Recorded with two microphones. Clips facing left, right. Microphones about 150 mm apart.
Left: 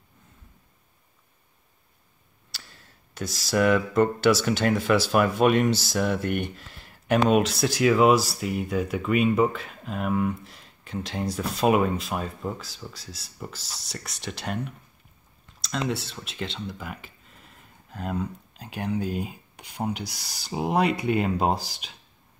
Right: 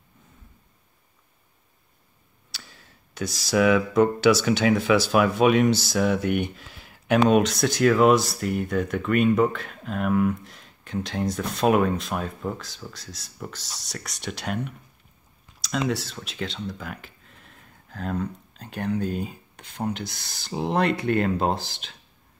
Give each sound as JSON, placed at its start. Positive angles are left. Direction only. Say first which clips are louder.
{"t": 2.5, "sound": "speech", "louder": "right 2 dB", "side_deg": 0}